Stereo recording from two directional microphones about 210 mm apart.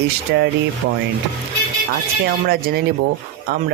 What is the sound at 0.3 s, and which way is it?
Speech, 50° right (ahead or behind).